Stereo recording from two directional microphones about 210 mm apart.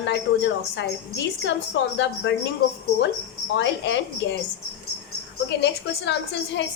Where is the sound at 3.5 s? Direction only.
55° left (ahead or behind).